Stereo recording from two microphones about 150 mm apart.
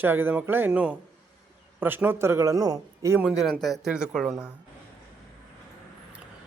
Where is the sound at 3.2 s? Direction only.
5° right (ahead or behind).